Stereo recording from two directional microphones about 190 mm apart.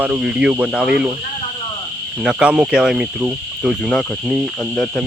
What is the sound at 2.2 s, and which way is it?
Speech, 5° right (ahead or behind).